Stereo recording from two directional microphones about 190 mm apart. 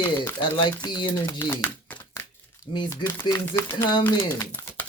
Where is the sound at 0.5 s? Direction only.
25° left (ahead or behind).